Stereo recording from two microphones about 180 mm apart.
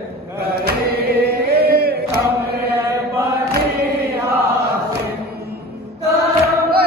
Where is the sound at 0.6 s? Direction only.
60° right (ahead or behind).